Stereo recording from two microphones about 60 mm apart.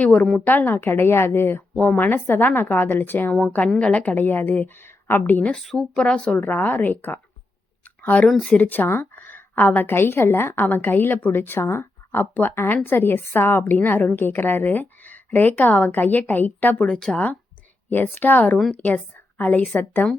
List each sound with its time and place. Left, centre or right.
0.0 s a woman's voice: left
3.8 s a woman's voice: left
5.5 s speech: centre
6.3 s a woman's voice: left
7.9 s a sound: left
8.3 s speech: centre
8.5 s a woman's voice: left
9.9 s a woman's voice: left
16.8 s speech: centre
17.8 s a woman's voice: left